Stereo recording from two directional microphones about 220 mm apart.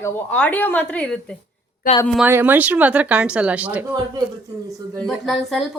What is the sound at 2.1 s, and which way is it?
Speech, 5° right (ahead or behind).